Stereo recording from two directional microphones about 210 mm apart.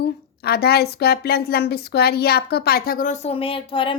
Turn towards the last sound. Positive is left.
turn(degrees=25)  # may be behind; listen again after turning